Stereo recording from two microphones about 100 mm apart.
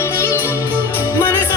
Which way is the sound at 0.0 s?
25° left (ahead or behind).